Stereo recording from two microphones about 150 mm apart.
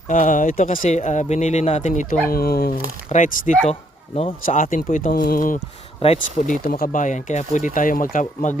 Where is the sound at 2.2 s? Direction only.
90° left.